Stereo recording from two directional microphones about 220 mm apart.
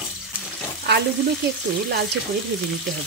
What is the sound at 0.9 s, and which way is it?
Frying, 50° right (ahead or behind).